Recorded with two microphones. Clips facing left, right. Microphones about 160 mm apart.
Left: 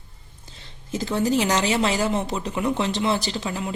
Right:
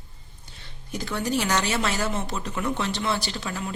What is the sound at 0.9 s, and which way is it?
Speech, 25° left (ahead or behind).